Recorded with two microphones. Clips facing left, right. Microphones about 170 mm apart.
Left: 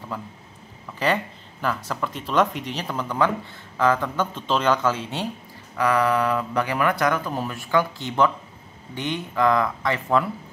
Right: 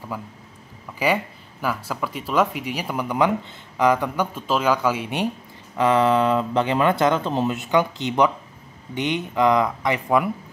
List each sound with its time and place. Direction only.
0.9 s speech: 10° right (ahead or behind)